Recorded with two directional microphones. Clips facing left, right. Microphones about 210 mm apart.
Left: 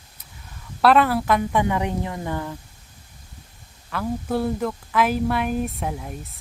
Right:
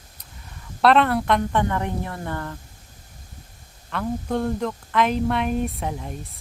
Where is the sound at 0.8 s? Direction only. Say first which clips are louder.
Even; 5° left (ahead or behind).